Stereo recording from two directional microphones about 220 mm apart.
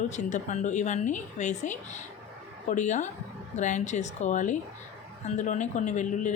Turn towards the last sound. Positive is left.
turn(degrees=35)  # may be behind; listen again after turning